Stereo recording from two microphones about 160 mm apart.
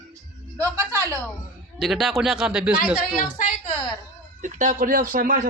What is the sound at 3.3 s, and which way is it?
Speech, 50° left (ahead or behind).